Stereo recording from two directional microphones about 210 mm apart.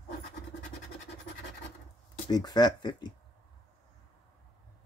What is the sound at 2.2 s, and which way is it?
Speech, 20° left (ahead or behind).